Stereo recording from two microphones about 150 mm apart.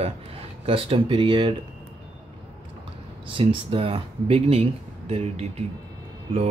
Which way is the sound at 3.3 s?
35° right (ahead or behind).